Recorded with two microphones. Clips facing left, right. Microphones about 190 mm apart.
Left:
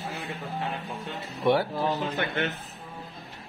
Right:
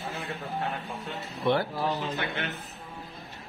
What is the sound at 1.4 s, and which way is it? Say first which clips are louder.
Speech: left 3 dB; 10° left (ahead or behind).